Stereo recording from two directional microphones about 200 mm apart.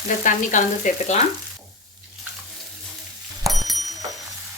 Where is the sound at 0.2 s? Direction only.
40° left (ahead or behind).